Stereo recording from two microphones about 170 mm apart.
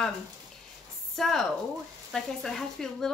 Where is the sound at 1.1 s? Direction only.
Centre (ahead or behind).